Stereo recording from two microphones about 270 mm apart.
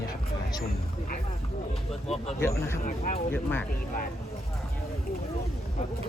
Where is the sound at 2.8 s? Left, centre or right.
Left.